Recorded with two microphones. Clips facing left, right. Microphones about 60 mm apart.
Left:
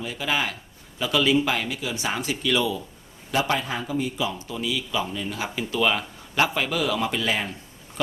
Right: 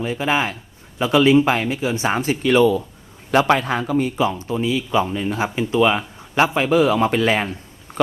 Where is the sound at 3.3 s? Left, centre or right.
Right.